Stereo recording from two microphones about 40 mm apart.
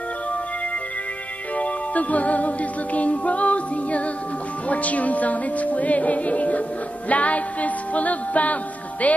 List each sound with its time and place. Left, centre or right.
1.6 s music: left